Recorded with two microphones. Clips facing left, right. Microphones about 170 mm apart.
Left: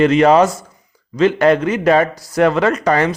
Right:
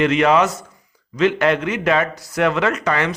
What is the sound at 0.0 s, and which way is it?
A man's voice, 35° left (ahead or behind).